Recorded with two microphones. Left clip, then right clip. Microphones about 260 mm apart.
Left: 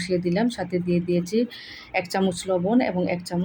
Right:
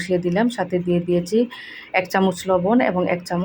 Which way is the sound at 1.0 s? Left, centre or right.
Centre.